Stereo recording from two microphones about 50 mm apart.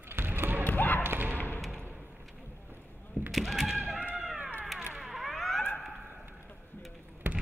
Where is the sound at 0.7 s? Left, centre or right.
Left.